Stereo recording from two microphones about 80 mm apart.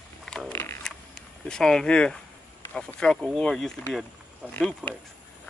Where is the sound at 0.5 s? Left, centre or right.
Left.